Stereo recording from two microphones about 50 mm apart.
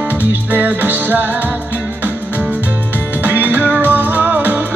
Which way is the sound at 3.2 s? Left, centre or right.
Right.